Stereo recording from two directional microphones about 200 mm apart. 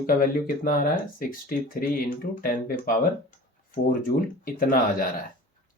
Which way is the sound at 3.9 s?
45° left (ahead or behind).